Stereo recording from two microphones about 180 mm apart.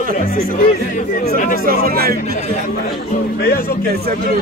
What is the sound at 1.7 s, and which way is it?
Speech, 55° right (ahead or behind).